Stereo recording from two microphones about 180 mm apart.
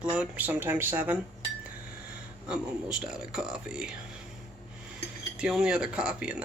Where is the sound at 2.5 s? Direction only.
5° right (ahead or behind).